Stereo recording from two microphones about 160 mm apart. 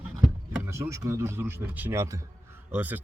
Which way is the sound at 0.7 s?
20° right (ahead or behind).